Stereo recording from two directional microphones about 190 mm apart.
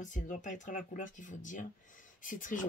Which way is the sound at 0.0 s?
40° left (ahead or behind).